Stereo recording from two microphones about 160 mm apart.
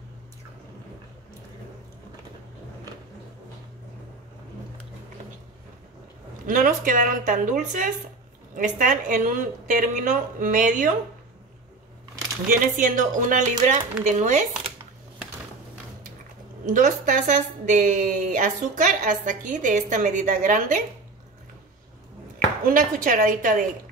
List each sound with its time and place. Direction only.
6.4 s a woman's voice: 55° right (ahead or behind)
12.4 s a woman's voice: 55° right (ahead or behind)
16.6 s a woman's voice: 50° right (ahead or behind)
22.7 s speech: 60° right (ahead or behind)